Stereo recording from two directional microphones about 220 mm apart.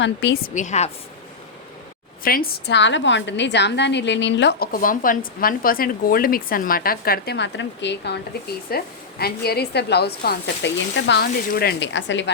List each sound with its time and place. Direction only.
0.0 s a woman's voice: 55° left (ahead or behind)
0.5 s a woman's voice: 30° left (ahead or behind)
2.2 s a woman's voice: 40° left (ahead or behind)